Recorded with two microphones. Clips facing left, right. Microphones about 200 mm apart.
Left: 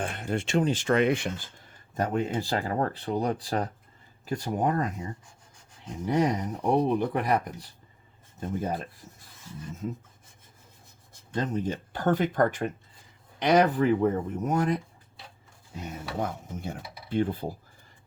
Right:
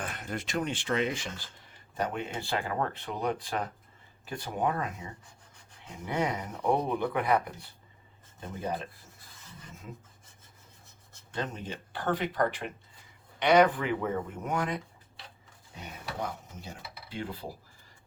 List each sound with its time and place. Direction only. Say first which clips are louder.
0.0 s a sound: left 6 dB; 30° left (ahead or behind)
0.7 s speech: left 7 dB; 45° left (ahead or behind); by 1.3 s 60° left (ahead or behind)
2.0 s speech: left 6 dB; 40° left (ahead or behind)
6.1 s speech: left 6 dB; 40° left (ahead or behind)
11.3 s speech: left 7 dB; 40° left (ahead or behind)